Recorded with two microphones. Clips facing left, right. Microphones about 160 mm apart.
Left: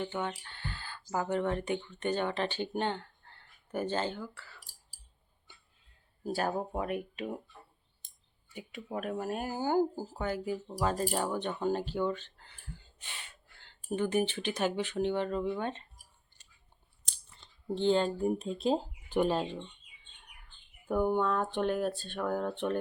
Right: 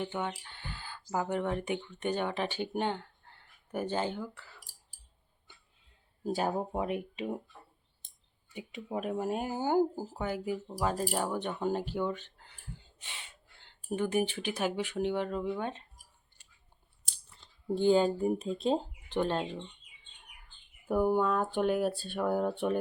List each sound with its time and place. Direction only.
0.0 s speech: 15° right (ahead or behind)
6.2 s speech: 20° right (ahead or behind)
8.5 s speech: 20° right (ahead or behind)
13.0 s gasp: 20° right (ahead or behind)
13.9 s speech: 5° right (ahead or behind)
17.7 s speech: 10° right (ahead or behind)
20.8 s speech: 5° right (ahead or behind)